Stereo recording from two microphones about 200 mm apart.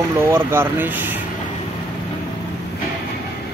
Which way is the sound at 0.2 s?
10° right (ahead or behind).